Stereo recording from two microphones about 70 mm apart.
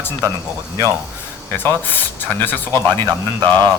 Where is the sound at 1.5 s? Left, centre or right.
Left.